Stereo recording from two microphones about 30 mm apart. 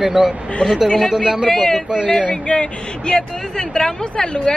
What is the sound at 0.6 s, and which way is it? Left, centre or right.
Speech, left.